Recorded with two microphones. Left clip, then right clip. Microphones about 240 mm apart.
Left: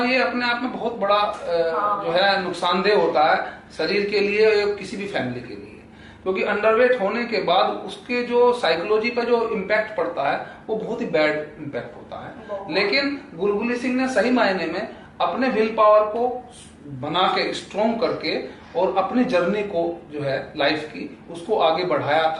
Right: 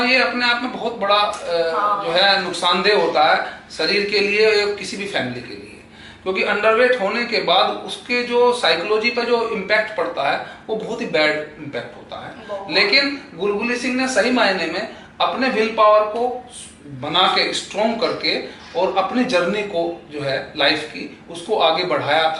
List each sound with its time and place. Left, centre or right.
0.0 s speech: centre
10.7 s speech: left
10.9 s speech: centre